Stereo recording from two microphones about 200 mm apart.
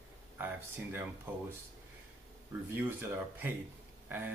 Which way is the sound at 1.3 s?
10° right (ahead or behind).